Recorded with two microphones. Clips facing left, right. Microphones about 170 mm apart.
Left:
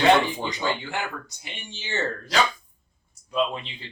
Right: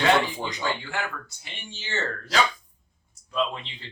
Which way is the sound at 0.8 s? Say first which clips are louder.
Left 1 dB; 20° left (ahead or behind).